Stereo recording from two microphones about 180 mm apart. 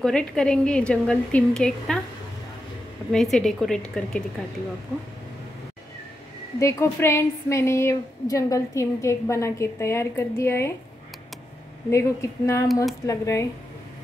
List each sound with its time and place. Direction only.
0.0 s a woman's voice: 5° left (ahead or behind)
3.1 s a woman's voice: centre (ahead or behind)
6.6 s a woman's voice: 15° left (ahead or behind)
11.9 s a woman's voice: 15° left (ahead or behind)